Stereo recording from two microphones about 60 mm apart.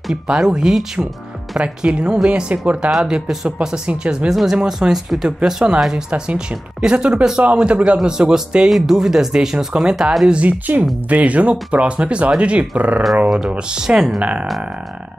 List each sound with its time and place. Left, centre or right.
0.1 s speech: centre
4.3 s speech: centre
8.2 s speech: centre
14.2 s speech: right